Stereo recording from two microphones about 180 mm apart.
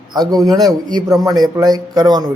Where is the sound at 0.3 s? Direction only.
20° right (ahead or behind).